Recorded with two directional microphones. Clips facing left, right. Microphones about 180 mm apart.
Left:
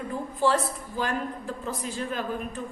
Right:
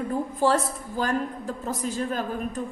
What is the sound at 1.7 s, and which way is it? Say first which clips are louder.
Speech: right 4 dB; 40° right (ahead or behind).